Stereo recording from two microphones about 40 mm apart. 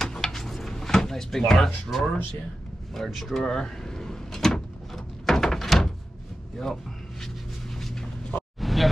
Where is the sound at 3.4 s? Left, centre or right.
Centre.